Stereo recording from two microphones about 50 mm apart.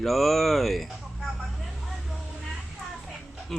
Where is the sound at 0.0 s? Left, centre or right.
Centre.